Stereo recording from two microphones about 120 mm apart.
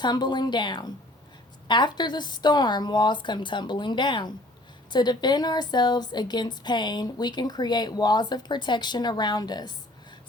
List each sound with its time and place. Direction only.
0.0 s a woman's voice: 35° left (ahead or behind)